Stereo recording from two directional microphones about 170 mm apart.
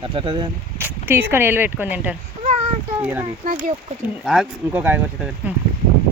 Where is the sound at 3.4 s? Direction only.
50° right (ahead or behind).